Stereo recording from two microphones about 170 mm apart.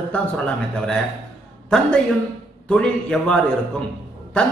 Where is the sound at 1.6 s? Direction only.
5° left (ahead or behind).